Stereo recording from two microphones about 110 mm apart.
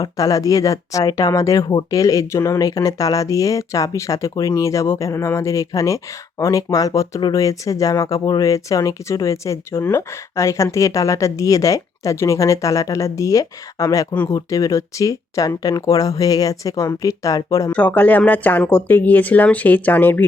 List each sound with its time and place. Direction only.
0.0 s speech: 30° left (ahead or behind)
7.2 s speech: 40° left (ahead or behind)
7.4 s speech: 30° left (ahead or behind)
17.7 s speech: 15° left (ahead or behind)